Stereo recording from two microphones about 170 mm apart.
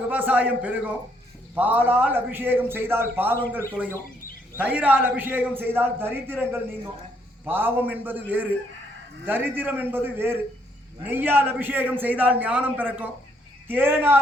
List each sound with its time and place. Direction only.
0.1 s a man's voice: 10° right (ahead or behind)